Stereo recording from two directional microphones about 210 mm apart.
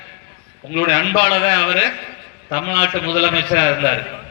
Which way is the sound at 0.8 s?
50° right (ahead or behind).